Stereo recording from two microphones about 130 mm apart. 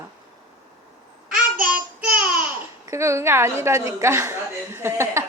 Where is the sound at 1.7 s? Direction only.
10° right (ahead or behind).